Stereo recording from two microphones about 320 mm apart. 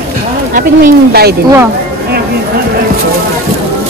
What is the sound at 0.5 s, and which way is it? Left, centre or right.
Speech, right.